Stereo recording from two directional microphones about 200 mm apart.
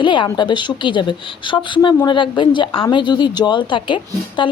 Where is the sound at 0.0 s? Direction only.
25° left (ahead or behind).